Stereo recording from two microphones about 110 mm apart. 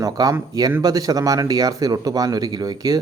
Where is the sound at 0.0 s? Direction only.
35° right (ahead or behind).